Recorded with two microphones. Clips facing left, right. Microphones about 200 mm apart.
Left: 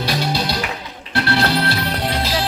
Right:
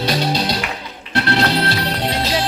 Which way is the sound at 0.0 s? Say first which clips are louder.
Right 2 dB; 20° right (ahead or behind).